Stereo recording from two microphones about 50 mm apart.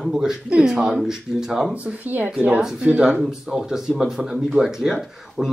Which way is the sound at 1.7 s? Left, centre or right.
Right.